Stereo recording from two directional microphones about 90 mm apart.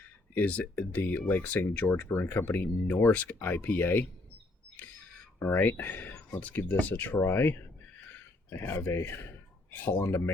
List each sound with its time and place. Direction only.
0.3 s speech: 20° left (ahead or behind)
5.4 s speech: 20° left (ahead or behind)